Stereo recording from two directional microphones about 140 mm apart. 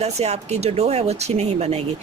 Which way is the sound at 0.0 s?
50° right (ahead or behind).